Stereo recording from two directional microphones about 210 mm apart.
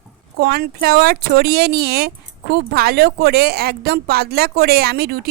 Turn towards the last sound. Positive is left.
turn(degrees=-50)  # may be behind; listen again after turning